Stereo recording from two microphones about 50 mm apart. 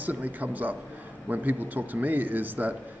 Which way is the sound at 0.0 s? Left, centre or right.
Right.